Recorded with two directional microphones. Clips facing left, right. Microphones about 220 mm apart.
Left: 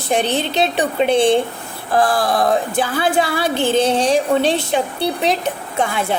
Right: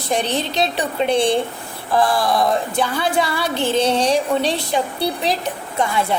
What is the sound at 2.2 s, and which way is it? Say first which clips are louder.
Speech: left 1 dB; 50° left (ahead or behind).